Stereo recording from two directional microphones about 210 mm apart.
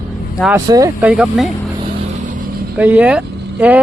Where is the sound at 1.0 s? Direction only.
5° right (ahead or behind).